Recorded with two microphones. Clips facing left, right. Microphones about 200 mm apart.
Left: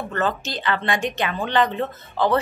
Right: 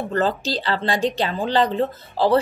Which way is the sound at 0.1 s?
35° right (ahead or behind).